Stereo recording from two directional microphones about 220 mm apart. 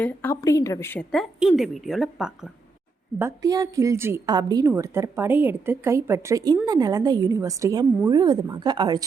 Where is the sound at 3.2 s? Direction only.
15° right (ahead or behind).